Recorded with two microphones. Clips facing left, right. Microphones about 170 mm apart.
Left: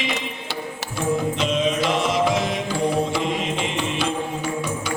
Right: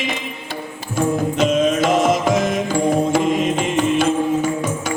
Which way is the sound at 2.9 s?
45° right (ahead or behind).